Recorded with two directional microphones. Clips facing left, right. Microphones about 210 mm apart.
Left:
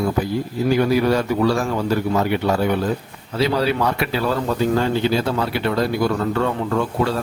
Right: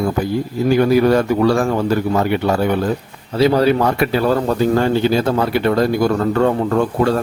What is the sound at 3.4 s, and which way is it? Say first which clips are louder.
Speech: right 6 dB; 50° right (ahead or behind).